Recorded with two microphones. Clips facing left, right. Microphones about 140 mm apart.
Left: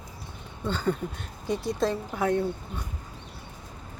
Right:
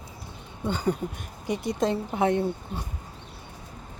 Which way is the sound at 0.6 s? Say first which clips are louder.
Right 1 dB; 15° right (ahead or behind).